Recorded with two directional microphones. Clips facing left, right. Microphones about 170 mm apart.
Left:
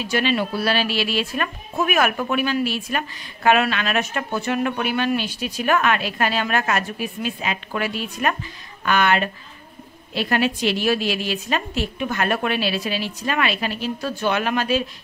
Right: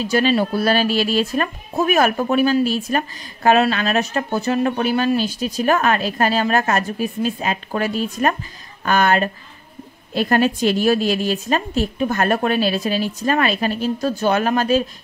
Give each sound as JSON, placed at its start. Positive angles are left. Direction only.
{"t": 0.0, "sound": "a woman's voice", "side_deg": -40}